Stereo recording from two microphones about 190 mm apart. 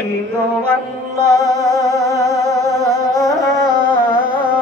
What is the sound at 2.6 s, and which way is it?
Music, 20° right (ahead or behind).